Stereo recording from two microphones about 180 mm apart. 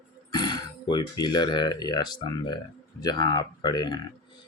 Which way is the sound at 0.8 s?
25° left (ahead or behind).